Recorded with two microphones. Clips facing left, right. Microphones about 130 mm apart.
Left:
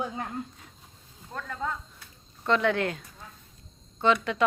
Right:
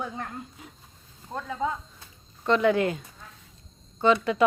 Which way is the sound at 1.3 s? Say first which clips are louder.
Right 4 dB; 15° right (ahead or behind).